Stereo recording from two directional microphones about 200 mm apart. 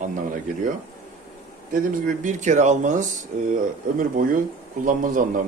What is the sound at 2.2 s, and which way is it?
A man's voice, 40° right (ahead or behind).